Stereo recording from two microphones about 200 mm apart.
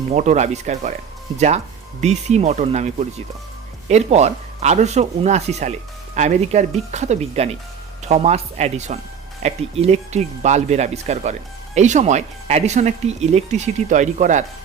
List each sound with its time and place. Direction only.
0.1 s speech: 35° right (ahead or behind)